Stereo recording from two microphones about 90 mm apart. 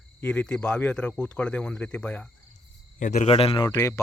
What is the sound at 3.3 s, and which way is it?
Speech, 90° left.